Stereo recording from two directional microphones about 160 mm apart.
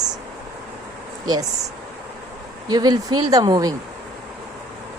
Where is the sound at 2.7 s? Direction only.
25° right (ahead or behind).